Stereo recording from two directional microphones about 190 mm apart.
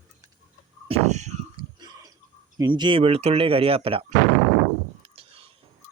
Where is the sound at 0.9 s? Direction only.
35° right (ahead or behind).